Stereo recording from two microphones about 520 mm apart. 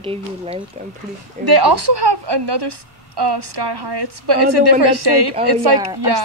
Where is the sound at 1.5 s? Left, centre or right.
Right.